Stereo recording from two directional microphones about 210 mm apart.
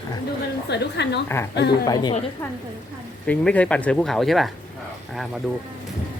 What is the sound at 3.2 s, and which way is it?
Speech, 5° left (ahead or behind).